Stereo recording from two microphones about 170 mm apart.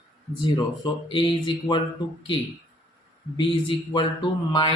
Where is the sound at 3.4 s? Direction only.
30° left (ahead or behind).